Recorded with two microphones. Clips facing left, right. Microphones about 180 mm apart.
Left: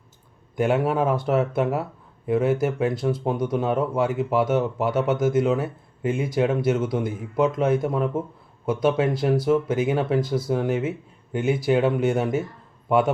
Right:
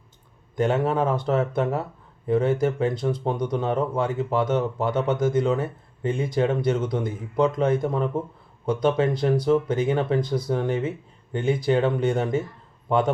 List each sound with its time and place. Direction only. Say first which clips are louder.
0.5 s speech: left 1 dB; 10° left (ahead or behind)